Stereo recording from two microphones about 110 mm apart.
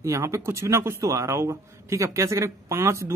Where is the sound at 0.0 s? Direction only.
25° right (ahead or behind).